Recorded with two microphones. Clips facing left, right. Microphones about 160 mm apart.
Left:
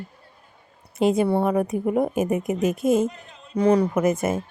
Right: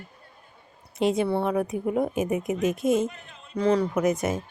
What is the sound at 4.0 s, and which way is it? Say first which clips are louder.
Speech: left 2 dB; 5° left (ahead or behind).